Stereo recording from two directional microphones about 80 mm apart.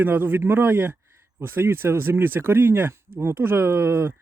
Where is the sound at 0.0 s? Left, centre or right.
Right.